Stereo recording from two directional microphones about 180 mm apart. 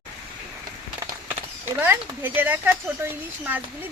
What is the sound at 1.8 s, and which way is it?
Speech, 10° right (ahead or behind).